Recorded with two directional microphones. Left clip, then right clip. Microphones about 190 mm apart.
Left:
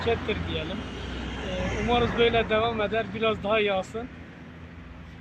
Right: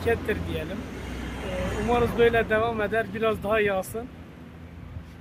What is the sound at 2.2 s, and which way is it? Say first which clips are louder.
Speech: right 3 dB; 50° right (ahead or behind).